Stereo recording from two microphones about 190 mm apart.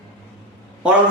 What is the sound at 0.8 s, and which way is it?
Speech, 5° right (ahead or behind).